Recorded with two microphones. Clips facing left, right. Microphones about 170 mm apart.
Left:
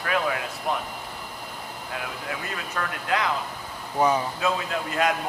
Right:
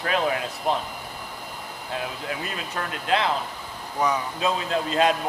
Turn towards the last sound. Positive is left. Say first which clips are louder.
# right 3 dB
turn(degrees=-25)  # may be behind; listen again after turning